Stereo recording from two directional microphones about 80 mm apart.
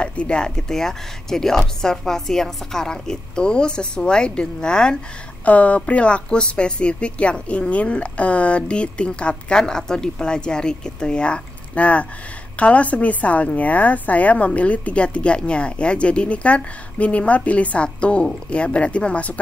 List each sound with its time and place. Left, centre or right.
0.0 s a woman's voice: centre